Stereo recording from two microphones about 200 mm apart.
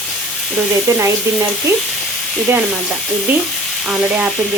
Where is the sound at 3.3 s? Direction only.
10° right (ahead or behind).